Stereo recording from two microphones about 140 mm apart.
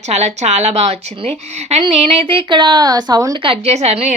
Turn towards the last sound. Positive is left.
turn(degrees=-50)  # may be behind; listen again after turning